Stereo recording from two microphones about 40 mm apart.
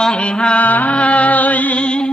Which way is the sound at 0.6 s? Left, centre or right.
Left.